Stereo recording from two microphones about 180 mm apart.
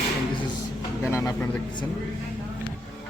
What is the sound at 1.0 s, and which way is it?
Speech, 15° left (ahead or behind).